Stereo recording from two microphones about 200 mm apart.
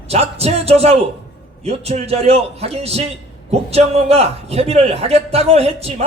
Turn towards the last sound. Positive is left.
turn(degrees=-30)  # may be behind; listen again after turning